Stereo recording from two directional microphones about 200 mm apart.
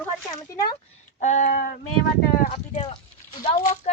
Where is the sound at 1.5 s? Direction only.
50° left (ahead or behind).